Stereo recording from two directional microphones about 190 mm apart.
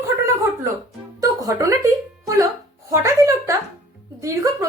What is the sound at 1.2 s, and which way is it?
Music, 15° right (ahead or behind).